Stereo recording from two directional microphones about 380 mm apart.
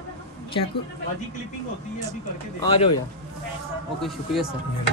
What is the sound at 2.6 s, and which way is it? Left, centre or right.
Speech, centre.